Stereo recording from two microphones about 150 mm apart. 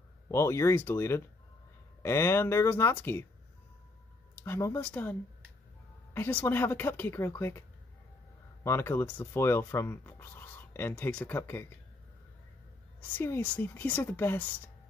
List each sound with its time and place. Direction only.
0.3 s speech: 20° left (ahead or behind)
4.4 s speech: 15° left (ahead or behind)
6.1 s speech: 15° left (ahead or behind)
8.6 s speech: 15° left (ahead or behind)
13.1 s speech: 15° left (ahead or behind)